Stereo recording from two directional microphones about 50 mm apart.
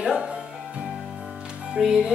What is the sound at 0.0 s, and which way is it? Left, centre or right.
Music, centre.